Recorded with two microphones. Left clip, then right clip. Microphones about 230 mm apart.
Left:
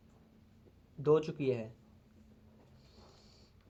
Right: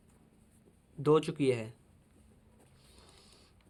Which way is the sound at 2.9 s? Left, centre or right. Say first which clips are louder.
Right 2 dB; right.